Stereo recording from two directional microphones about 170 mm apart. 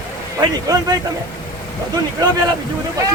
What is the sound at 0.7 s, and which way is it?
Speech, 20° right (ahead or behind).